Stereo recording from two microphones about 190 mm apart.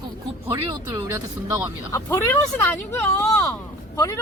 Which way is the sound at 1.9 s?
15° left (ahead or behind).